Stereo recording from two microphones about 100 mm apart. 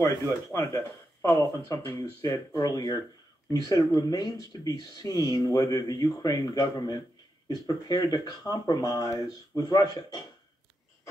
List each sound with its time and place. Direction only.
0.5 s speech: 30° left (ahead or behind)